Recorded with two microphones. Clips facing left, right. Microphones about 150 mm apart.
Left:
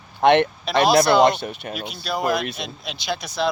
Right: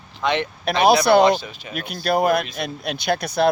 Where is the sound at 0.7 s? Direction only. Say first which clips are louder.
Right 1 dB; 60° right (ahead or behind).